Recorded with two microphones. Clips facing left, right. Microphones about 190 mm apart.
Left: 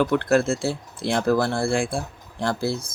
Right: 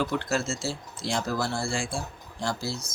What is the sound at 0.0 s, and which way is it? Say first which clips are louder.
Speech: left 8 dB; 55° left (ahead or behind).